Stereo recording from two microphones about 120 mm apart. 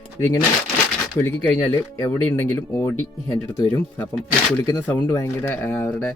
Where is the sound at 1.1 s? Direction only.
15° left (ahead or behind).